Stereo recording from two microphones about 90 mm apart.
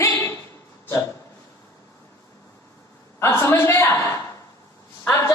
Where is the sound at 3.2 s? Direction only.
30° left (ahead or behind).